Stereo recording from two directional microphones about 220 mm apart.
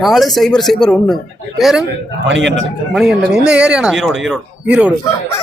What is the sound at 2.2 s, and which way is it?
Speech, 55° right (ahead or behind).